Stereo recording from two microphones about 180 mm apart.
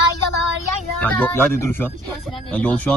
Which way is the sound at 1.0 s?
10° left (ahead or behind).